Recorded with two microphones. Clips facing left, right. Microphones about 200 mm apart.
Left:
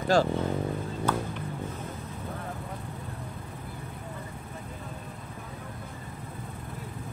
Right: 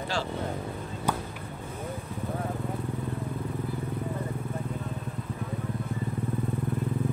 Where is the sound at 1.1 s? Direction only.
15° right (ahead or behind).